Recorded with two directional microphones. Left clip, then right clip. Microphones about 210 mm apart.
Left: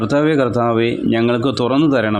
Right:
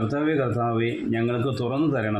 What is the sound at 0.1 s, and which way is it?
Speech, 45° left (ahead or behind).